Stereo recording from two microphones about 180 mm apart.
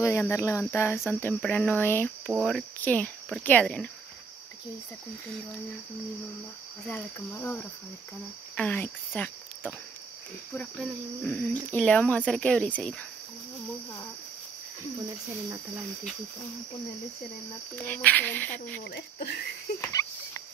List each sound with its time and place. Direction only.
0.0 s speech: 15° left (ahead or behind)
6.9 s speech: 10° left (ahead or behind)
17.7 s speech: 10° left (ahead or behind)
18.9 s speech: 65° left (ahead or behind)
19.8 s cricket: 15° left (ahead or behind)